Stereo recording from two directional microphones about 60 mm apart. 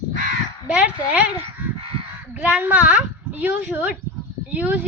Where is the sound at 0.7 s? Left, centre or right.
Right.